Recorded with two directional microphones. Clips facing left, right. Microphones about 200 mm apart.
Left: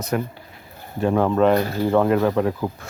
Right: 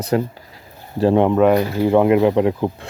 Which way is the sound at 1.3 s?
10° right (ahead or behind).